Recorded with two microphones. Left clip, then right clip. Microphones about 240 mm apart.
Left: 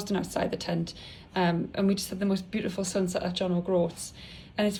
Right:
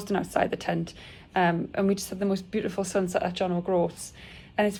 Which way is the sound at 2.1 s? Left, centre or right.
Right.